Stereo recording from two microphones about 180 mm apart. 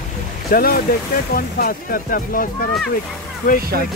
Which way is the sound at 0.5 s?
55° left (ahead or behind).